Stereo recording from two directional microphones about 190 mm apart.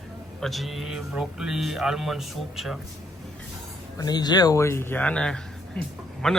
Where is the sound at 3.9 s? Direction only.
20° left (ahead or behind).